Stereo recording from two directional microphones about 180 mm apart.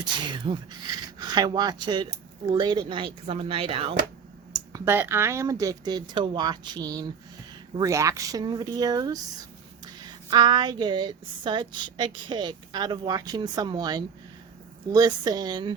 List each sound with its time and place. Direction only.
0.0 s speech: 25° right (ahead or behind)
4.7 s speech: 15° right (ahead or behind)